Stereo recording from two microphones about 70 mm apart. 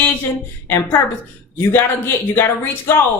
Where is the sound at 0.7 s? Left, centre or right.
Left.